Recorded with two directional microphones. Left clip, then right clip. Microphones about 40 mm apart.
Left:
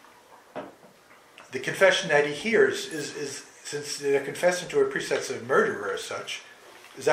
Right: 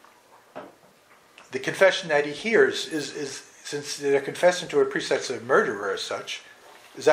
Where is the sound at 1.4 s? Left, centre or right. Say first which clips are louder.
Right 2 dB; right.